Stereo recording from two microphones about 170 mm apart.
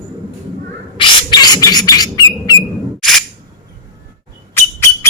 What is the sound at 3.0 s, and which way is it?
Single-lens reflex camera, centre (ahead or behind).